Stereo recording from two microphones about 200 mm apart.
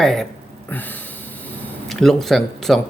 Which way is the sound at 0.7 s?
10° left (ahead or behind).